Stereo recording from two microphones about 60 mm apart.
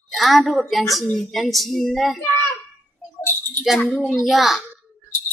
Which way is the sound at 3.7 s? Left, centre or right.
Centre.